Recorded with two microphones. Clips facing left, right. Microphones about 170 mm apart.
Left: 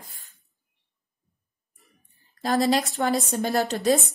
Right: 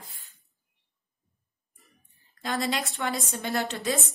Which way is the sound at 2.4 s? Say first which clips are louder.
Left 7 dB; 40° left (ahead or behind).